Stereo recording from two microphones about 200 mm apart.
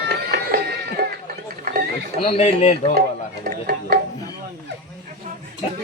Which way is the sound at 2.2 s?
30° left (ahead or behind).